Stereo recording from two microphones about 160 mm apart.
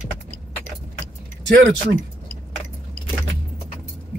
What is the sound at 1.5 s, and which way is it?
Speech, 90° right.